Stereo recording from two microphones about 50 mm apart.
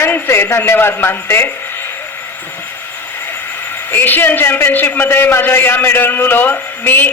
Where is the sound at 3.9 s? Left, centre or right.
Left.